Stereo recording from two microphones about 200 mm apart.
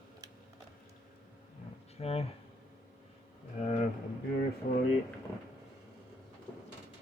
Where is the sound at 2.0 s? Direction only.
30° left (ahead or behind).